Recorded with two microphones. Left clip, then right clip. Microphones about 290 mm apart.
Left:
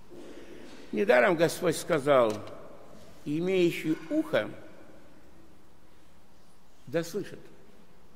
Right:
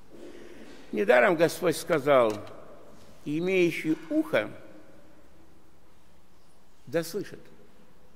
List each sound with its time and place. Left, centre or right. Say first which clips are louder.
0.9 s a man's voice: right 2 dB; centre
6.9 s a man's voice: right 2 dB; centre